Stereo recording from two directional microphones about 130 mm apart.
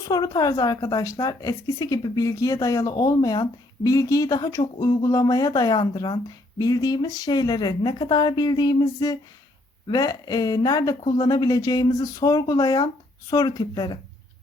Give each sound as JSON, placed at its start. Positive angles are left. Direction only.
{"t": 0.1, "sound": "a woman's voice", "side_deg": 30}